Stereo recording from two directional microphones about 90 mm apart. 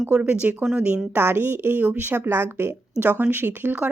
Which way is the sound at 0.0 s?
20° right (ahead or behind).